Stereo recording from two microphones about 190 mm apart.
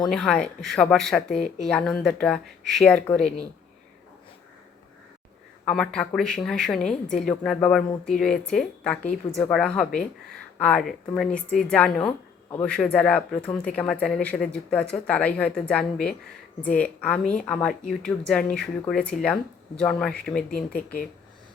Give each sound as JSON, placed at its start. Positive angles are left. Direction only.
{"t": 0.1, "sound": "a woman's voice", "side_deg": 5}
{"t": 5.6, "sound": "a woman's voice", "side_deg": 5}
{"t": 20.5, "sound": "speech", "side_deg": 50}